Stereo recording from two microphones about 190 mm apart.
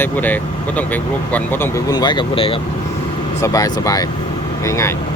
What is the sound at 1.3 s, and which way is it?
Speech, 15° left (ahead or behind).